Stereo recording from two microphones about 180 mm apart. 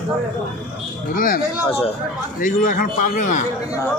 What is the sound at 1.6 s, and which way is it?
Speech, 30° left (ahead or behind).